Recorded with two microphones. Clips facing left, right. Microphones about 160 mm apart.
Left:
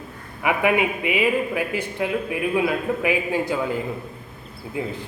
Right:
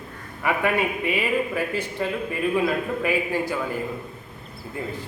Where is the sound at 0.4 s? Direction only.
15° left (ahead or behind).